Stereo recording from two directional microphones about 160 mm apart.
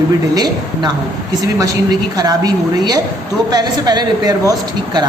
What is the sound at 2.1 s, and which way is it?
A woman's voice, 25° right (ahead or behind).